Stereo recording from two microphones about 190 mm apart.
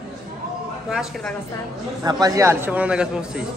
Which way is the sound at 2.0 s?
20° right (ahead or behind).